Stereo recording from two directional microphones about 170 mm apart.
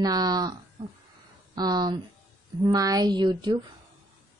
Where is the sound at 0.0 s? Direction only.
20° right (ahead or behind).